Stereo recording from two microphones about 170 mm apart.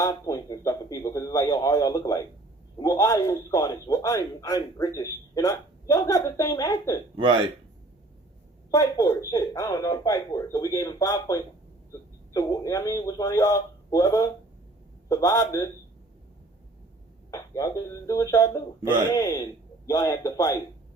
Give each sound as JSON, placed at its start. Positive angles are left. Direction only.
{"t": 0.0, "sound": "a man's voice", "side_deg": 20}
{"t": 7.2, "sound": "speech", "side_deg": -30}
{"t": 8.7, "sound": "a man's voice", "side_deg": 20}
{"t": 17.3, "sound": "a man's voice", "side_deg": 20}